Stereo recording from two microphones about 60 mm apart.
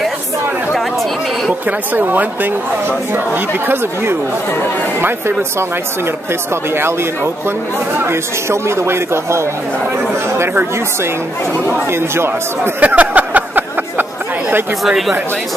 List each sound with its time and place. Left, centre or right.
2.0 s speech: right
3.6 s speech: right
8.0 s speech: right
12.8 s a sound: right
14.9 s speech: centre